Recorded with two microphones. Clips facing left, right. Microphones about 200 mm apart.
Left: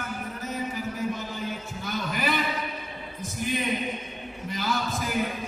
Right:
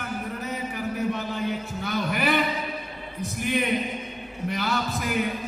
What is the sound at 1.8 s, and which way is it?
Music, 65° right (ahead or behind).